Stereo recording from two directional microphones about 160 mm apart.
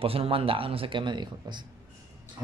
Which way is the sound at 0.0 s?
35° right (ahead or behind).